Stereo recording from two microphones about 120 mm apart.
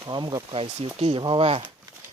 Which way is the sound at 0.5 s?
55° right (ahead or behind).